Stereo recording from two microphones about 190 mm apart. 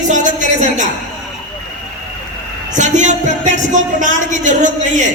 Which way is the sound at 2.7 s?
40° right (ahead or behind).